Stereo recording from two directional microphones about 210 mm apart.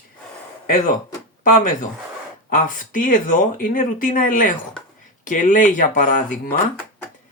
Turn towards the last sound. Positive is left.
turn(degrees=40)  # may be behind; listen again after turning